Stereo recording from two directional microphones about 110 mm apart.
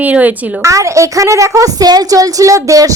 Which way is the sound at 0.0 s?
15° right (ahead or behind).